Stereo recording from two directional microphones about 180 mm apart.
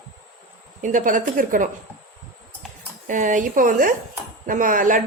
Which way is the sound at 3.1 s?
45° right (ahead or behind).